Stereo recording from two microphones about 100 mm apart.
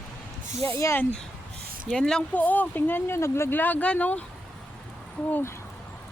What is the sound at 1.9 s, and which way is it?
Speech, 5° left (ahead or behind).